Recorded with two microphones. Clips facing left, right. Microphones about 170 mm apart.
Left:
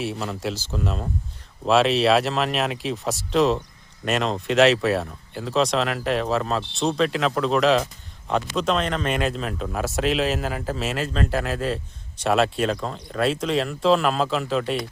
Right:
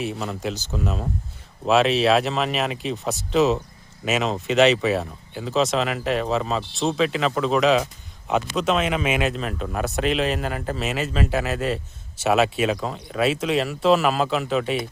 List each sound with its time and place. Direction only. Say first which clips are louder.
0.0 s speech: even; centre (ahead or behind)